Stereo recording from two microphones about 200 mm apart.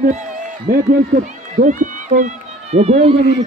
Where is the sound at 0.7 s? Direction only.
45° right (ahead or behind).